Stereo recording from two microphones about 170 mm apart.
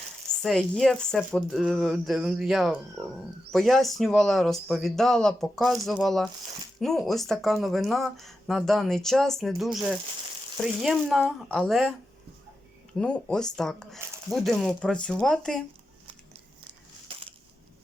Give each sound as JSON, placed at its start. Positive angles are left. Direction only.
{"t": 0.4, "sound": "speech", "side_deg": 5}
{"t": 13.0, "sound": "speech", "side_deg": 5}
{"t": 17.1, "sound": "crushing", "side_deg": -35}